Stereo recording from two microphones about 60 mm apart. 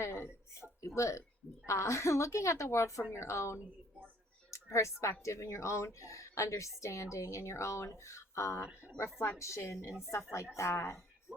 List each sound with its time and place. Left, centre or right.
0.0 s a sound: left
0.8 s speech: left
9.0 s speech: left
11.3 s music: centre